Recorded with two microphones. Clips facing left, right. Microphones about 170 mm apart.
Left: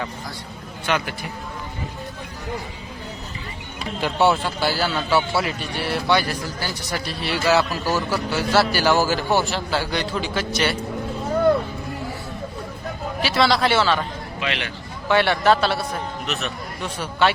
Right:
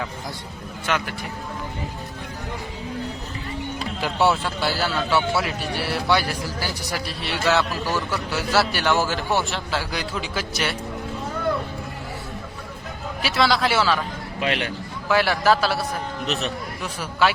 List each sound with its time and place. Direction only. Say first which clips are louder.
0.9 s a man's voice: left 2 dB; centre (ahead or behind)
4.0 s a man's voice: left 2 dB; centre (ahead or behind)
13.2 s a man's voice: left 2 dB; centre (ahead or behind)
14.3 s speech: right 3 dB; 45° right (ahead or behind)
15.0 s a man's voice: left 2 dB; 5° right (ahead or behind)
16.2 s a man's voice: right 5 dB; 35° right (ahead or behind)
16.8 s a man's voice: left 1 dB; 5° right (ahead or behind)